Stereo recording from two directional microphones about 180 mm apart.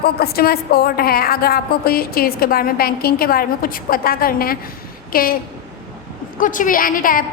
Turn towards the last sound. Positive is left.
turn(degrees=50)  # may be behind; listen again after turning